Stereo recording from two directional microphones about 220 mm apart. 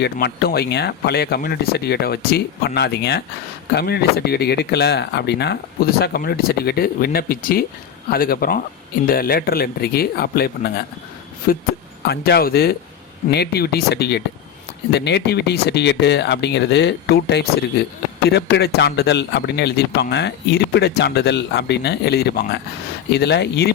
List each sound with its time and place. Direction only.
0.0 s a man's voice: 45° left (ahead or behind)